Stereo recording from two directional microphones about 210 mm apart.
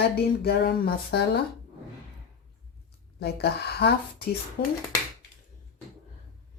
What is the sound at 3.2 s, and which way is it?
Speech, 50° left (ahead or behind).